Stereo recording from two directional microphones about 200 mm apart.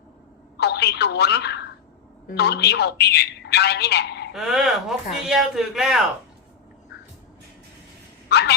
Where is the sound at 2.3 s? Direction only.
55° left (ahead or behind).